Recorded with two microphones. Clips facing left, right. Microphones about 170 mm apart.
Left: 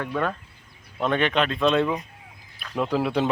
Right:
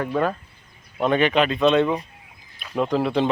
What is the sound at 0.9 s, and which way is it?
A man's voice, 5° right (ahead or behind).